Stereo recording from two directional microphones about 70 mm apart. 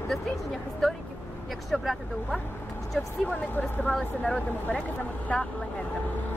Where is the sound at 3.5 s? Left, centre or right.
Left.